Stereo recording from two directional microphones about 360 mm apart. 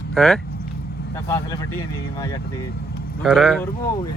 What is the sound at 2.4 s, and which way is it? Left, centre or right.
Speech, left.